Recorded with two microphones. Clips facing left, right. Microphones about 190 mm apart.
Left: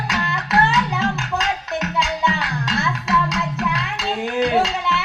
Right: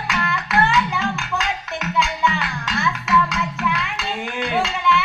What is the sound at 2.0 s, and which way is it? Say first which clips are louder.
Music: even; 35° left (ahead or behind).